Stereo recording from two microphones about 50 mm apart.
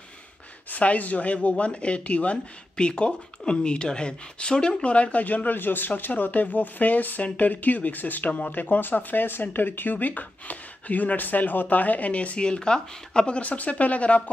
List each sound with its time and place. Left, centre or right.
0.7 s speech: left
13.4 s speech: left